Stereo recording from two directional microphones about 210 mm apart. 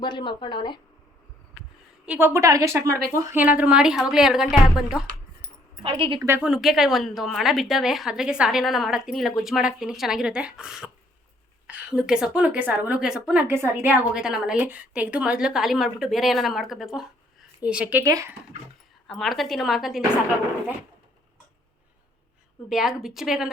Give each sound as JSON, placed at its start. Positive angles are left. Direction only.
{"t": 0.0, "sound": "speech", "side_deg": 20}
{"t": 2.0, "sound": "a woman's voice", "side_deg": -10}
{"t": 5.8, "sound": "a woman's voice", "side_deg": -25}
{"t": 6.2, "sound": "a woman's voice", "side_deg": -10}
{"t": 19.0, "sound": "a woman's voice", "side_deg": 0}
{"t": 22.7, "sound": "a woman's voice", "side_deg": 0}